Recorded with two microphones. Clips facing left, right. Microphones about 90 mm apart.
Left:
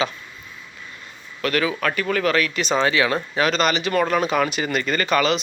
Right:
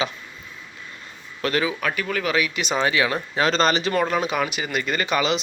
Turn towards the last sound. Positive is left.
turn(degrees=-20)  # may be behind; listen again after turning